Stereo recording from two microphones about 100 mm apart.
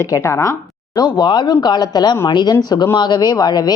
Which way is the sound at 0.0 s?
30° left (ahead or behind).